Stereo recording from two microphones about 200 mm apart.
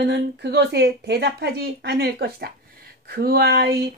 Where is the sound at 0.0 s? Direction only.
55° right (ahead or behind).